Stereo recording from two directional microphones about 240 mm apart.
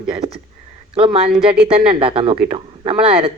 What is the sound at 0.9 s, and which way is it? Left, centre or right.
Speech, right.